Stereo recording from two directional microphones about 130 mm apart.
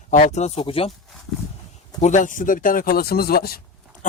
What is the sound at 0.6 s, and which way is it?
Speech, 45° left (ahead or behind).